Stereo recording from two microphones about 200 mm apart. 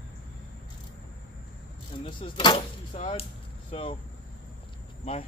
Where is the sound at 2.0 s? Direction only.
25° left (ahead or behind).